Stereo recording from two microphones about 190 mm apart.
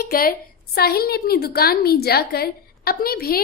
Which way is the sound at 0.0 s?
50° left (ahead or behind).